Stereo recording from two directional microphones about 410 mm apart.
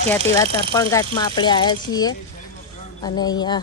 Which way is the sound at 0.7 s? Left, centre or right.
Centre.